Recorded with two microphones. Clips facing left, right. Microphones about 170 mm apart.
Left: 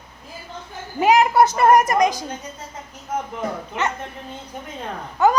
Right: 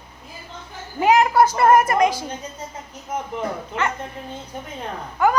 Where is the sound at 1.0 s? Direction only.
15° left (ahead or behind).